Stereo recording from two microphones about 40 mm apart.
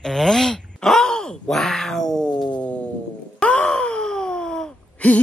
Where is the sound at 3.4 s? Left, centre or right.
Left.